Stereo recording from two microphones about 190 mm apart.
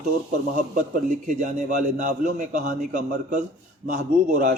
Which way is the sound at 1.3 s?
40° right (ahead or behind).